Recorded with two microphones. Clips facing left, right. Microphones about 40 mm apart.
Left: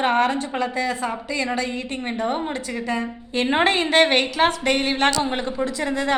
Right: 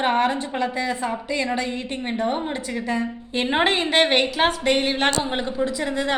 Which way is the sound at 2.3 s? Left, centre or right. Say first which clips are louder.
Even; centre.